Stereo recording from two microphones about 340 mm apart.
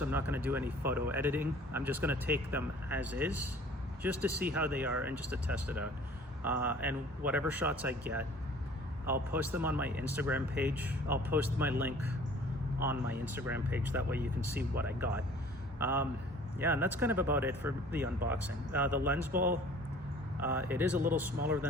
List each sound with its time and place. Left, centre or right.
0.0 s speech: centre
9.3 s speech: centre
19.3 s speech: right
20.4 s speech: centre